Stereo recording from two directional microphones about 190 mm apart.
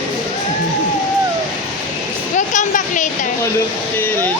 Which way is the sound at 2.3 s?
40° left (ahead or behind).